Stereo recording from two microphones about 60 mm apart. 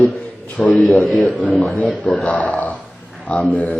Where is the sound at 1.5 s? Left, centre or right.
Left.